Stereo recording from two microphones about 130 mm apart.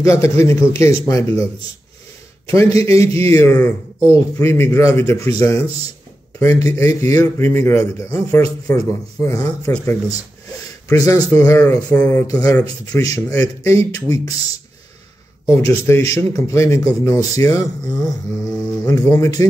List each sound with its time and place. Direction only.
0.0 s a man's voice: 20° left (ahead or behind)
2.4 s a man's voice: 20° left (ahead or behind)
6.4 s a man's voice: 25° left (ahead or behind)
12.3 s a man's voice: 30° left (ahead or behind)
15.4 s a man's voice: 20° left (ahead or behind)